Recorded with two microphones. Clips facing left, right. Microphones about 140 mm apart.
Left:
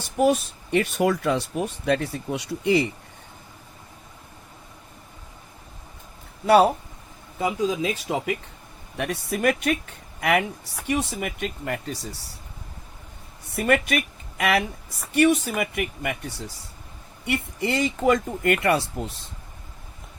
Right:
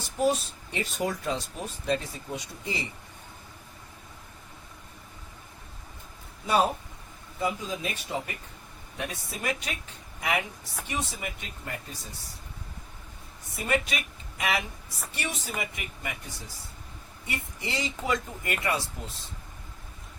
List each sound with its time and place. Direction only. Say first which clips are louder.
0.0 s speech: left 5 dB; 60° left (ahead or behind)
6.4 s speech: left 8 dB; 70° left (ahead or behind)
7.3 s speech: left 7 dB; 90° left
9.0 s speech: left 9 dB; 70° left (ahead or behind)
13.5 s speech: left 7 dB; 60° left (ahead or behind)
17.2 s speech: left 10 dB; 65° left (ahead or behind)